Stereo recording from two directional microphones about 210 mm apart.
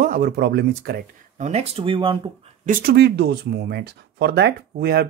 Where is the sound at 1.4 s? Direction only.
30° right (ahead or behind).